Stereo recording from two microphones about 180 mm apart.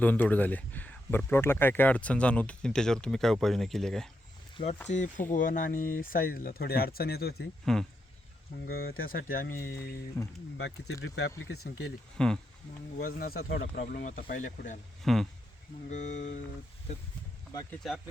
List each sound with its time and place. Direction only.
0.0 s speech: 10° left (ahead or behind)
4.5 s speech: 35° left (ahead or behind); by 7.4 s 60° left (ahead or behind)
7.6 s speech: centre (ahead or behind)
8.6 s speech: 55° left (ahead or behind)
9.6 s speech: 15° left (ahead or behind)
11.0 s speech: 70° left (ahead or behind)
12.1 s speech: 5° left (ahead or behind)
13.0 s speech: 55° left (ahead or behind)
15.0 s speech: centre (ahead or behind)
15.9 s speech: 40° left (ahead or behind)
17.5 s speech: 20° left (ahead or behind)